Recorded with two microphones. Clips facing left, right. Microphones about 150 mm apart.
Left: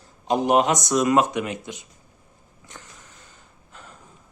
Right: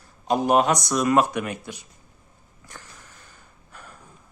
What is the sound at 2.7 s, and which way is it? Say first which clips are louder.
Sniff: even; 20° left (ahead or behind).